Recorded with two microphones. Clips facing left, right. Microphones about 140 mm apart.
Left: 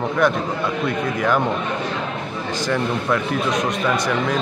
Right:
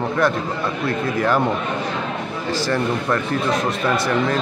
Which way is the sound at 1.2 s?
5° right (ahead or behind).